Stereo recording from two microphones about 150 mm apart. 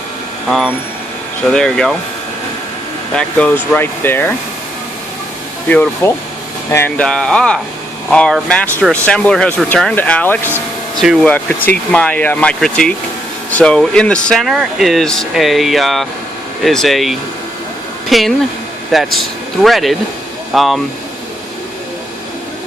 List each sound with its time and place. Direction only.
0.4 s speech: centre (ahead or behind)
3.2 s speech: 10° left (ahead or behind)
5.6 s speech: 10° left (ahead or behind)
11.0 s speech: centre (ahead or behind)
11.3 s speech: 10° left (ahead or behind)